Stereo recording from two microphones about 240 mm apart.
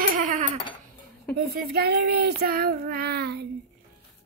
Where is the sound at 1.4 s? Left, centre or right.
Right.